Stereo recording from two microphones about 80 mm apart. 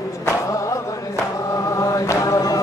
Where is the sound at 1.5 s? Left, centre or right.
Left.